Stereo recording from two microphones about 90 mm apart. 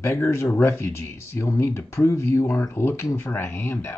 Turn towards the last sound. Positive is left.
turn(degrees=25)  # may be behind; listen again after turning